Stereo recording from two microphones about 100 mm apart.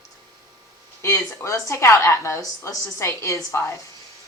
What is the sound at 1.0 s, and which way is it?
A woman's voice, 30° left (ahead or behind).